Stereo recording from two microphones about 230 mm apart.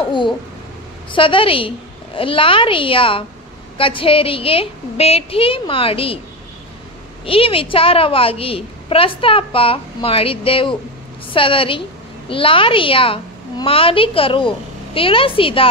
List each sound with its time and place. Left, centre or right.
1.1 s a woman's voice: left
7.2 s a woman's voice: left